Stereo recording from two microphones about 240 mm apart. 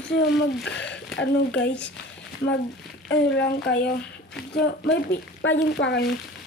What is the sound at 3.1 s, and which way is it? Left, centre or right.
A woman's voice, left.